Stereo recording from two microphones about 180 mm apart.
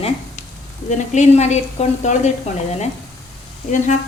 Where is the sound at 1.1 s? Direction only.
40° left (ahead or behind).